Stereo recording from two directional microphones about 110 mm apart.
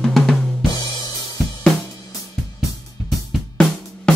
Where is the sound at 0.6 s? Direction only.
35° left (ahead or behind).